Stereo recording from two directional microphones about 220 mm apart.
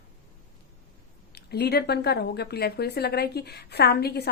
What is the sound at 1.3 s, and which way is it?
A woman's voice, 50° left (ahead or behind).